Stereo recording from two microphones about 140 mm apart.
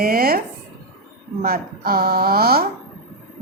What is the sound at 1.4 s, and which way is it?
A woman's voice, 90° right.